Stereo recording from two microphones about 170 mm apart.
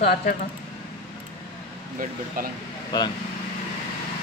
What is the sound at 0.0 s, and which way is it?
Speech, 60° left (ahead or behind).